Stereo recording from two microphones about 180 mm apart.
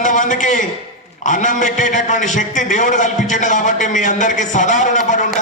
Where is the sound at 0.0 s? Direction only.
45° left (ahead or behind).